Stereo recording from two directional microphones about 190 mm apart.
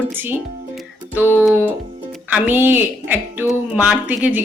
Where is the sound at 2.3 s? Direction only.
10° right (ahead or behind).